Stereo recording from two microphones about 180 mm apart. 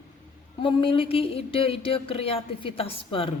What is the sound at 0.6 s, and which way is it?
Speech, 30° left (ahead or behind).